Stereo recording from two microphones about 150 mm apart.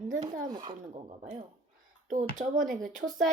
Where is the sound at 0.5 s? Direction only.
30° right (ahead or behind).